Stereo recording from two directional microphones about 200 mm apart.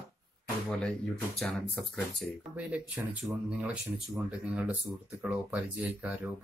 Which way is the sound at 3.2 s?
10° right (ahead or behind).